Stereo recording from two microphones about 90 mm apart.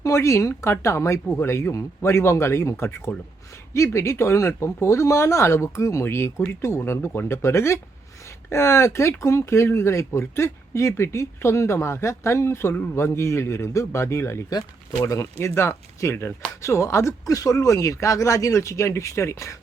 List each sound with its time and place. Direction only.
0.0 s speech: 35° left (ahead or behind)